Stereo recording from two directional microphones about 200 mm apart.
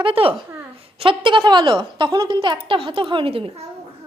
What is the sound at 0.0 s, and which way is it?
A woman's voice, 25° right (ahead or behind).